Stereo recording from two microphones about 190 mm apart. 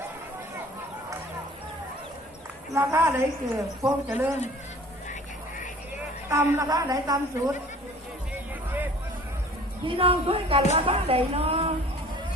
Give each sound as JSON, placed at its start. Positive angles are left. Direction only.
{"t": 2.7, "sound": "speech", "side_deg": -10}
{"t": 6.2, "sound": "speech", "side_deg": -15}
{"t": 9.8, "sound": "a woman's voice", "side_deg": -30}